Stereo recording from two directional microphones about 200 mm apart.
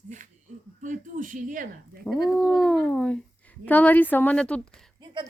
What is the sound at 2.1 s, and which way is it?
Speech, centre (ahead or behind).